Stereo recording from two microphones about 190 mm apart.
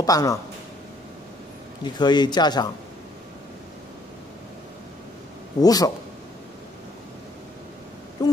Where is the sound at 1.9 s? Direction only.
20° left (ahead or behind).